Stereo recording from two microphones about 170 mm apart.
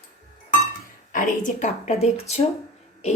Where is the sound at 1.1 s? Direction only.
45° left (ahead or behind).